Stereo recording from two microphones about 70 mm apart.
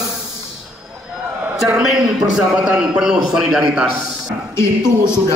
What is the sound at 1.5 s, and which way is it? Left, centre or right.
A man's voice, centre.